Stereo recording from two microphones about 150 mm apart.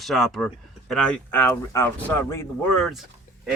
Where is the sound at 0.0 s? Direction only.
Centre (ahead or behind); by 2.5 s 15° left (ahead or behind).